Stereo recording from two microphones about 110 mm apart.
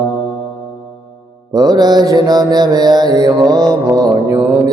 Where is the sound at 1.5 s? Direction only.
35° right (ahead or behind).